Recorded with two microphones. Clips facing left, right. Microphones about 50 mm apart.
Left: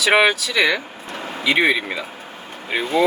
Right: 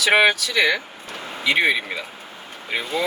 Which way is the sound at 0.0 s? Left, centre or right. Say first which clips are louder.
Left 1 dB; centre.